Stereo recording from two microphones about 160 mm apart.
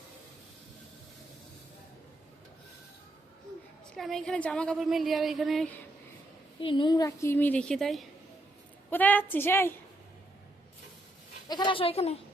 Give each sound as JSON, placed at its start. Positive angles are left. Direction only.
{"t": 3.9, "sound": "a woman's voice", "side_deg": 0}
{"t": 6.6, "sound": "a woman's voice", "side_deg": 30}
{"t": 11.4, "sound": "speech", "side_deg": 25}